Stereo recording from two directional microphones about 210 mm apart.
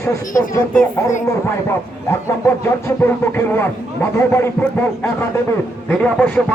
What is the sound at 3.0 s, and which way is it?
A man's voice, 10° left (ahead or behind).